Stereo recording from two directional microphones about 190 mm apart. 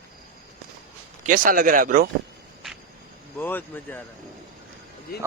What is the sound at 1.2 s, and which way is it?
Speech, 45° right (ahead or behind).